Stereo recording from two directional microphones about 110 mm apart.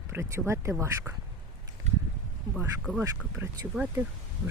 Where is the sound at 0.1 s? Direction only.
25° right (ahead or behind).